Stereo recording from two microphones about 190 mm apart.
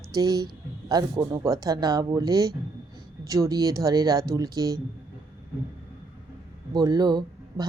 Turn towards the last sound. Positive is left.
turn(degrees=-20)  # may be behind; listen again after turning